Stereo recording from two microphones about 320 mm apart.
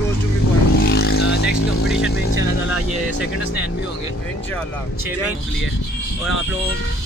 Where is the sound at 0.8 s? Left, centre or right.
Left.